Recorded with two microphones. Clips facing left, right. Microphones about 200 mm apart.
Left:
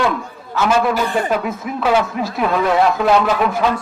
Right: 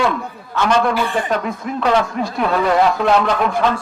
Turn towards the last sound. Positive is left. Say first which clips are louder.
# even
turn(degrees=5)  # may be behind; listen again after turning